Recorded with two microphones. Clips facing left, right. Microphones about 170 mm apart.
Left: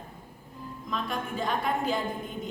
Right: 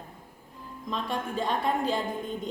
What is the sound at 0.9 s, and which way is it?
A woman's voice, 30° right (ahead or behind).